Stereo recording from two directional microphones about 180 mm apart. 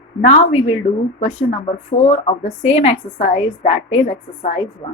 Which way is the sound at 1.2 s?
40° left (ahead or behind).